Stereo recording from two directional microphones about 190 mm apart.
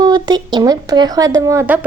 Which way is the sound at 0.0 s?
20° right (ahead or behind).